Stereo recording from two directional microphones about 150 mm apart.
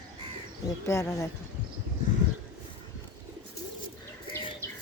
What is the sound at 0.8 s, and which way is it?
Speech, 20° left (ahead or behind).